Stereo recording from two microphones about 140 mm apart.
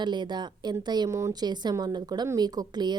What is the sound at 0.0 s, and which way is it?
A woman's voice, 30° right (ahead or behind).